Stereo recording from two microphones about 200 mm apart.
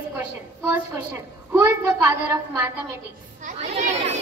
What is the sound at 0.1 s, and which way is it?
A woman's voice, 15° right (ahead or behind).